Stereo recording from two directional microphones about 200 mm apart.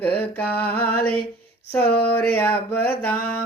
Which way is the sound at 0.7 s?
10° left (ahead or behind).